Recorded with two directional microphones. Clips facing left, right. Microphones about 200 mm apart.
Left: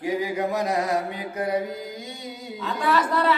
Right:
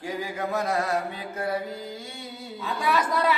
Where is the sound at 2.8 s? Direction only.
10° right (ahead or behind).